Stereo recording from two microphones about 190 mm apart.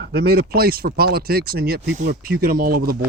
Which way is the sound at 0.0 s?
60° right (ahead or behind).